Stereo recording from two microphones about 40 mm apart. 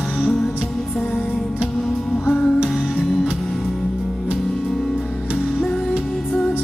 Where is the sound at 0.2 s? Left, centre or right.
Centre.